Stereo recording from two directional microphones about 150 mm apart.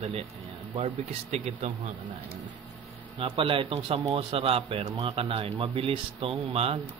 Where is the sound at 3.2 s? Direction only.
40° right (ahead or behind).